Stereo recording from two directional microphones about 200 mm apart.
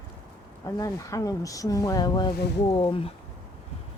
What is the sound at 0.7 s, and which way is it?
Speech, 15° left (ahead or behind).